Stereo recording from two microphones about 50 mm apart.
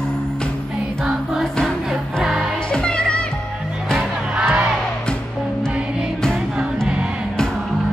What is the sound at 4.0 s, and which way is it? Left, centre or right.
Music, right.